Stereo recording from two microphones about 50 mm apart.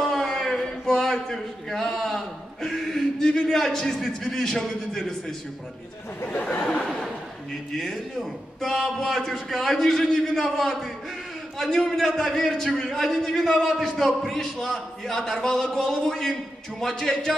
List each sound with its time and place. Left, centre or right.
0.0 s a man's voice: centre
6.6 s speech: centre
7.7 s a man's voice: centre